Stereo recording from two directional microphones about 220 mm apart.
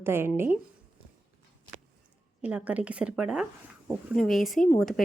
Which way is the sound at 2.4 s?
5° right (ahead or behind).